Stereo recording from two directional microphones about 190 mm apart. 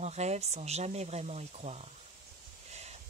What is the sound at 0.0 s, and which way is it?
A woman's voice, 35° right (ahead or behind).